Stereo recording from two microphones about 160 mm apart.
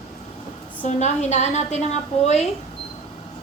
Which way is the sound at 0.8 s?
45° left (ahead or behind).